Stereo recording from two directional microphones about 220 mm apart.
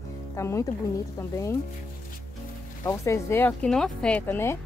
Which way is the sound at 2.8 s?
15° left (ahead or behind).